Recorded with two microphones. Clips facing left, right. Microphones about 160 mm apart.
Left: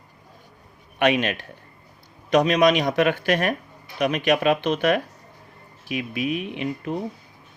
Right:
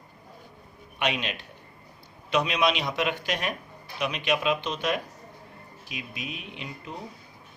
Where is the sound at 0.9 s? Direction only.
55° left (ahead or behind).